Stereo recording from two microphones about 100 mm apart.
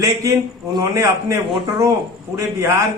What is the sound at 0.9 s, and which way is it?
Speech, 30° right (ahead or behind).